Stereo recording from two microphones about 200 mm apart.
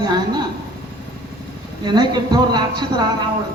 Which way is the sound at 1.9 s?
20° right (ahead or behind).